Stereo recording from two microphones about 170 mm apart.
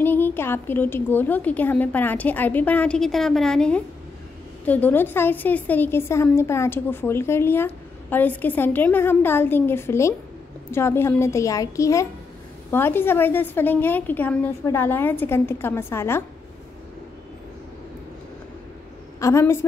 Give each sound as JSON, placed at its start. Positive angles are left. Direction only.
{"t": 0.0, "sound": "a woman's voice", "side_deg": 10}
{"t": 19.1, "sound": "a woman's voice", "side_deg": 15}